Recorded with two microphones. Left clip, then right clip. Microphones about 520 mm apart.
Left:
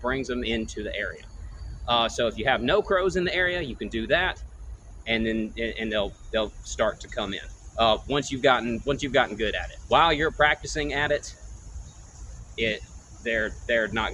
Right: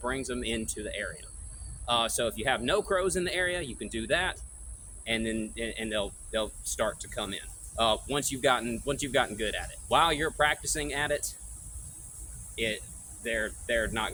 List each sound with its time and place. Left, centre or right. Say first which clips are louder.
0.0 s speech: left 5 dB; right
12.5 s speech: left 5 dB; right